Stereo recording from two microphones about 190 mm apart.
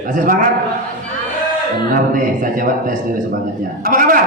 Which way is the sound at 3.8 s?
45° right (ahead or behind).